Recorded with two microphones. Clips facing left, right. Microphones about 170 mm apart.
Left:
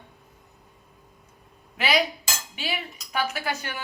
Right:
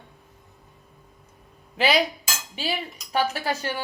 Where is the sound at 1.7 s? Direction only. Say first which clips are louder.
Right 3 dB; 30° right (ahead or behind).